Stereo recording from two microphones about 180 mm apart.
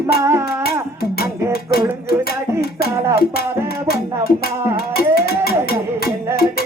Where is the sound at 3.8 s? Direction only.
60° left (ahead or behind).